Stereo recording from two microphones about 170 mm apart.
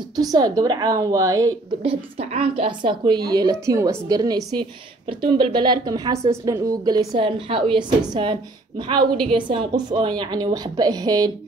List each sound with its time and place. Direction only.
0.1 s a woman's voice: 20° right (ahead or behind)
1.8 s a woman's voice: 35° right (ahead or behind)